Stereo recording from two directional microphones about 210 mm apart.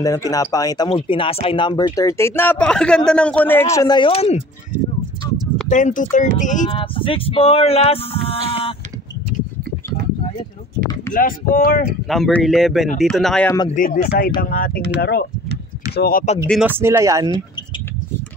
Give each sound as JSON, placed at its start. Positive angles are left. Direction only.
{"t": 0.0, "sound": "speech", "side_deg": 15}
{"t": 5.7, "sound": "speech", "side_deg": 35}
{"t": 11.1, "sound": "speech", "side_deg": 40}
{"t": 12.1, "sound": "speech", "side_deg": 0}
{"t": 13.7, "sound": "speech", "side_deg": 40}
{"t": 16.4, "sound": "speech", "side_deg": -5}